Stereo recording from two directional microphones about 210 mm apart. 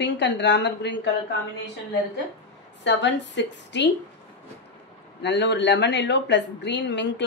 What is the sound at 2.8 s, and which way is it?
Speech, 60° left (ahead or behind).